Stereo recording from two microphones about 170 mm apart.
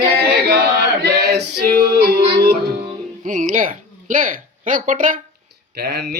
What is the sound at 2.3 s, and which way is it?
Music, 70° right (ahead or behind).